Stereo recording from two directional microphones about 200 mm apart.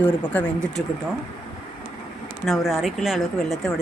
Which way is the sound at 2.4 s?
Centre (ahead or behind).